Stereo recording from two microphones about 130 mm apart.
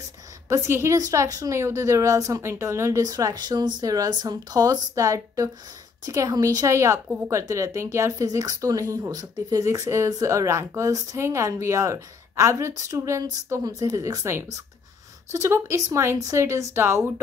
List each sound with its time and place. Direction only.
0.5 s speech: 20° right (ahead or behind)